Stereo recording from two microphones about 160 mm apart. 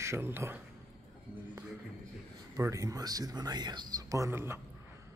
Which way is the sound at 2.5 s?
20° right (ahead or behind).